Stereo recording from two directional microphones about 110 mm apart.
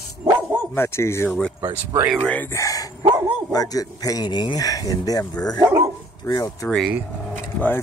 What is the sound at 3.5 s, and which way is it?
Speech, 35° left (ahead or behind).